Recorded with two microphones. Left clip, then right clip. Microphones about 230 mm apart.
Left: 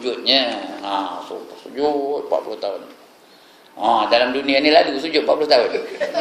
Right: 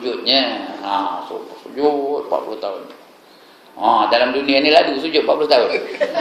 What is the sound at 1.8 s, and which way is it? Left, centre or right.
Speech, left.